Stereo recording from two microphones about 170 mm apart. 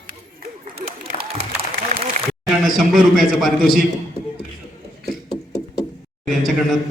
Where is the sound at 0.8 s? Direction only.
60° right (ahead or behind).